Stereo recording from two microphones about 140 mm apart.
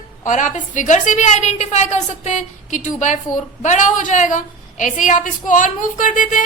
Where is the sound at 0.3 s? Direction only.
65° left (ahead or behind).